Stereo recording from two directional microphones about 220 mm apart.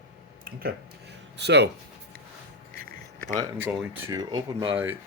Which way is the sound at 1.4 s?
50° right (ahead or behind).